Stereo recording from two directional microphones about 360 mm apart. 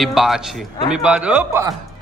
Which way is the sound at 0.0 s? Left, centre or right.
Centre.